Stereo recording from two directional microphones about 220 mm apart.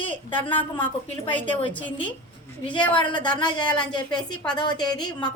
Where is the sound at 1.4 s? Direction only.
20° left (ahead or behind).